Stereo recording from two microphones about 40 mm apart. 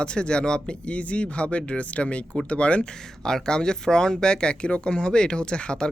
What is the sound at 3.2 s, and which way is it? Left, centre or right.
Speech, centre.